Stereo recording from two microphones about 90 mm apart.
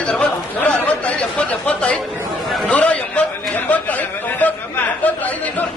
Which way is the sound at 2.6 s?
15° left (ahead or behind).